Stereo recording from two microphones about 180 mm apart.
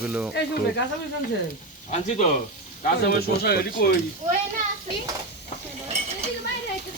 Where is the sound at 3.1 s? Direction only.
60° left (ahead or behind).